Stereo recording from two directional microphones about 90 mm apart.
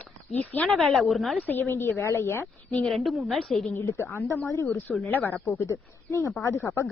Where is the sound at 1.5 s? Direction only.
25° left (ahead or behind).